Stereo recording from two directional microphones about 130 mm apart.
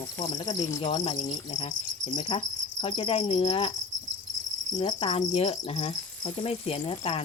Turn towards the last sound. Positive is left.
turn(degrees=45)  # may be behind; listen again after turning